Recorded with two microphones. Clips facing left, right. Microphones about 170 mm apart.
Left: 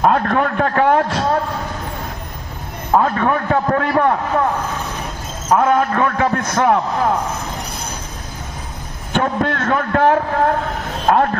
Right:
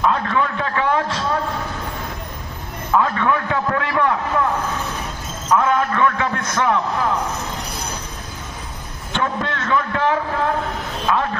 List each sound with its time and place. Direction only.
0.0 s a man's voice: 50° left (ahead or behind)
2.9 s a man's voice: 40° left (ahead or behind)
5.5 s a man's voice: 40° left (ahead or behind)
9.1 s a man's voice: 45° left (ahead or behind)